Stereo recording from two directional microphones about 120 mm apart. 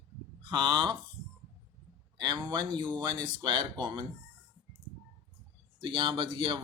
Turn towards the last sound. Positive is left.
turn(degrees=-45)  # may be behind; listen again after turning